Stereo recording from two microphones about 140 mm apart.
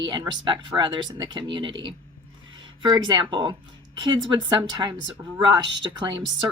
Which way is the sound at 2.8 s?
30° right (ahead or behind).